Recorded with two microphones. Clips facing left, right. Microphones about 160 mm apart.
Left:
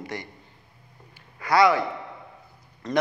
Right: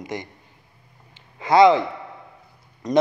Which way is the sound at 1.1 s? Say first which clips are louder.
Right 5 dB; 20° right (ahead or behind).